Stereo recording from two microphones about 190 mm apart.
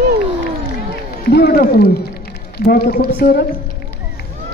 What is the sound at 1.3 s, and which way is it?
A man's voice, 55° left (ahead or behind).